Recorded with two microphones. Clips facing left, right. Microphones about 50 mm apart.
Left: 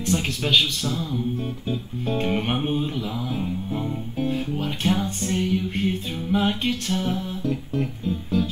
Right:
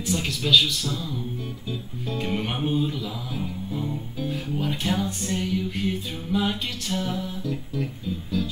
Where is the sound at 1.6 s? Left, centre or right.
Left.